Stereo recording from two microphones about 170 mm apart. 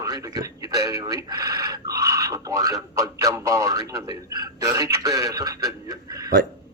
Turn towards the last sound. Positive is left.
turn(degrees=-20)  # may be behind; listen again after turning